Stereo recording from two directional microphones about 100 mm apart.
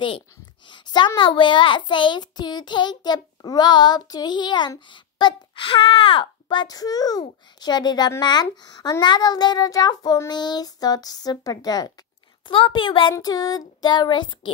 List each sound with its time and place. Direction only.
0.7 s a child's voice: 50° left (ahead or behind)
12.4 s a woman's voice: 60° left (ahead or behind)
13.2 s a child's voice: 40° left (ahead or behind)